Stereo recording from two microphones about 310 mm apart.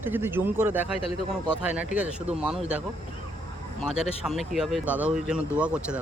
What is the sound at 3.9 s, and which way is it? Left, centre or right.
Speech, centre.